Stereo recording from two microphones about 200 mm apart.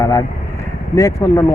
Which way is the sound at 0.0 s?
15° left (ahead or behind).